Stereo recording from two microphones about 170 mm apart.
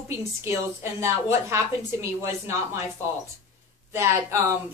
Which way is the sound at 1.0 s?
15° right (ahead or behind).